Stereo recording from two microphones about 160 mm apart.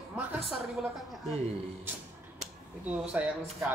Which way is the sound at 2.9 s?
10° right (ahead or behind).